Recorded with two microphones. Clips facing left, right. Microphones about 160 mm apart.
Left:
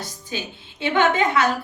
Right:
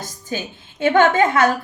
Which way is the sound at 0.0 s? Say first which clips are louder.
Right 3 dB; 50° right (ahead or behind).